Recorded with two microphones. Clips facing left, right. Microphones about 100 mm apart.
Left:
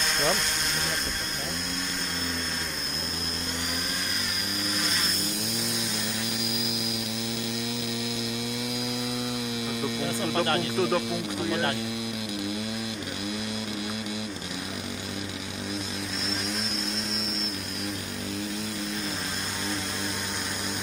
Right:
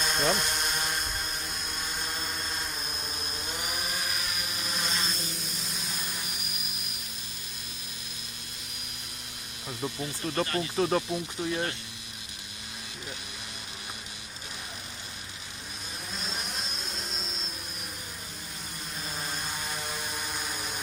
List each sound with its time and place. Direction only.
0.0 s a sound: 5° right (ahead or behind)
4.7 s vehicle: centre (ahead or behind)
9.9 s speech: 75° left (ahead or behind)
10.8 s speech: 5° left (ahead or behind)